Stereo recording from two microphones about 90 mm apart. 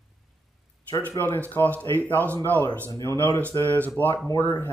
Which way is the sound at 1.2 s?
45° left (ahead or behind).